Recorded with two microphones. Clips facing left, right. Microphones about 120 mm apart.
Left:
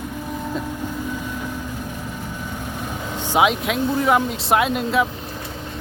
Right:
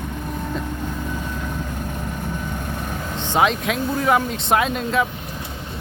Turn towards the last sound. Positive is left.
turn(degrees=5)  # may be behind; listen again after turning